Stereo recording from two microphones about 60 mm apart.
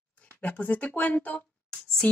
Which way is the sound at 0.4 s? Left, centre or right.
Left.